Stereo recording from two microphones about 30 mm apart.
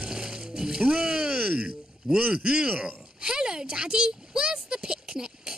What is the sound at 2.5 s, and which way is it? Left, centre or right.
Speech, right.